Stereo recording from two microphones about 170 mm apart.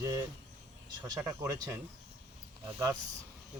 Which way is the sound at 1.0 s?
20° right (ahead or behind).